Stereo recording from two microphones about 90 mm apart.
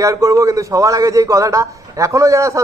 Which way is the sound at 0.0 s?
35° right (ahead or behind).